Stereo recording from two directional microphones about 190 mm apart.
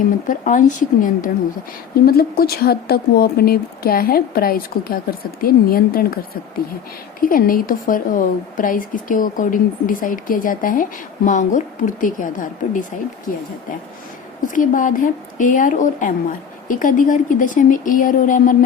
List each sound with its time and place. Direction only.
0.3 s a woman's voice: 45° left (ahead or behind)
14.4 s a woman's voice: 45° left (ahead or behind)